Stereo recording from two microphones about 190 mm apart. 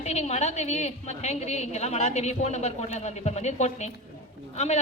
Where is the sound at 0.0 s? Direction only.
35° left (ahead or behind).